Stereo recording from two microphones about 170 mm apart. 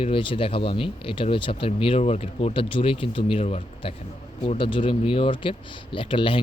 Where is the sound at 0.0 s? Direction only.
30° left (ahead or behind).